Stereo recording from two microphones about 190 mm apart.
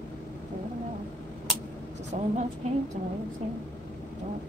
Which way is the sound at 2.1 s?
35° right (ahead or behind).